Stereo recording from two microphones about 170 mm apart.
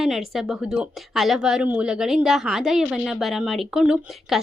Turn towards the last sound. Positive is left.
turn(degrees=0)  # may be behind; listen again after turning